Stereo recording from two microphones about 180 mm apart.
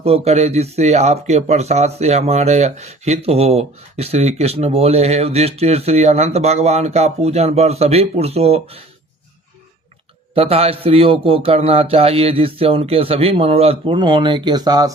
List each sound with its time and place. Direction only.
0.0 s speech: 35° right (ahead or behind)
10.3 s speech: 35° right (ahead or behind)